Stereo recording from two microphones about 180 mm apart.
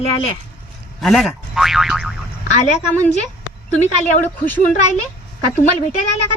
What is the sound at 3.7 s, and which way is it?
Speech, 40° left (ahead or behind).